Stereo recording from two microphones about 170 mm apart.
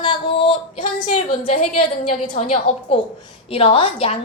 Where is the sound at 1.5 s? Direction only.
45° left (ahead or behind).